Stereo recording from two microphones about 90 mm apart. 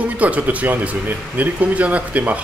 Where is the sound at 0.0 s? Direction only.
15° right (ahead or behind).